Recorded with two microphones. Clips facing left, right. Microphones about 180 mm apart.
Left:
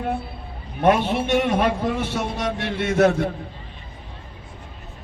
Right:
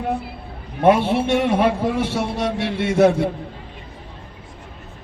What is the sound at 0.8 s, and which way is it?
Speech, 30° right (ahead or behind).